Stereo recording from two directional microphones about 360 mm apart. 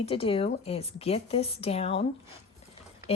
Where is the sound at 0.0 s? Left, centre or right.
Centre.